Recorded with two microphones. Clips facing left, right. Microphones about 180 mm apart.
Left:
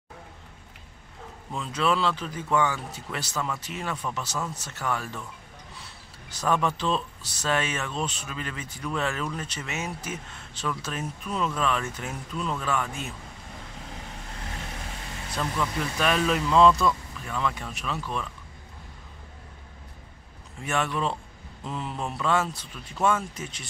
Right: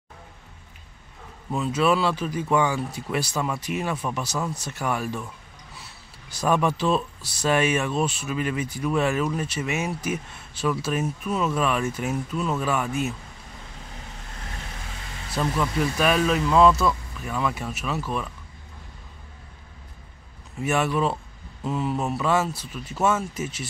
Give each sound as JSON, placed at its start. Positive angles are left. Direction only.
{"t": 1.5, "sound": "speech", "side_deg": -5}
{"t": 6.3, "sound": "speech", "side_deg": -10}
{"t": 15.3, "sound": "speech", "side_deg": -10}
{"t": 20.6, "sound": "speech", "side_deg": -10}